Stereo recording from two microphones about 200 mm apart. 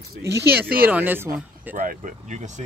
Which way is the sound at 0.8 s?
10° right (ahead or behind).